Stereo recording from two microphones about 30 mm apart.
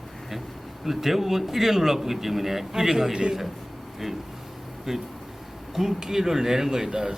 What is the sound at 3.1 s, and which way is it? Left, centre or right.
Speech, right.